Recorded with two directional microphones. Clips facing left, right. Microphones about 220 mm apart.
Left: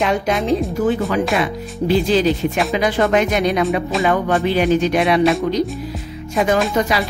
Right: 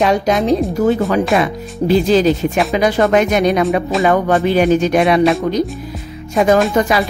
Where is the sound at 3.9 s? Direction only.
Centre (ahead or behind).